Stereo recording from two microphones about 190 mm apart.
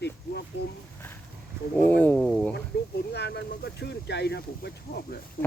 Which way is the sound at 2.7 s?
55° left (ahead or behind).